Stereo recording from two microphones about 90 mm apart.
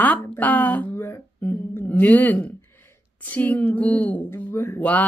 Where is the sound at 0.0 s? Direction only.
15° left (ahead or behind).